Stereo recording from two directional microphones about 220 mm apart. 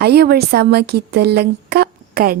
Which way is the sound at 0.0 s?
45° right (ahead or behind).